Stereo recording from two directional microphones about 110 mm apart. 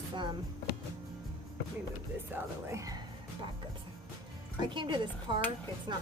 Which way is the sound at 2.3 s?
25° right (ahead or behind).